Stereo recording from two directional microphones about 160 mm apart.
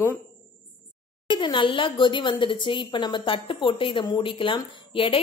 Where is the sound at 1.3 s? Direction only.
30° left (ahead or behind).